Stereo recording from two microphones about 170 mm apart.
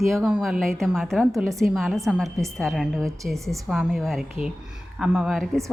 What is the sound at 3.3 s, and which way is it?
Speech, 15° right (ahead or behind).